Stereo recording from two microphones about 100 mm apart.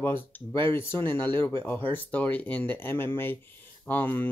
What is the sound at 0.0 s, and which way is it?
Speech, 20° left (ahead or behind).